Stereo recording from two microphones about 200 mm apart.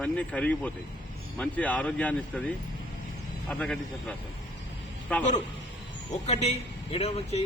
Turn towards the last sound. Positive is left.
turn(degrees=30)  # may be behind; listen again after turning